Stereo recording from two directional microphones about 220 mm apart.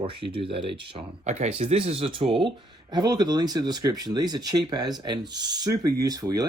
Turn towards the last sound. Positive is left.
turn(degrees=-15)  # may be behind; listen again after turning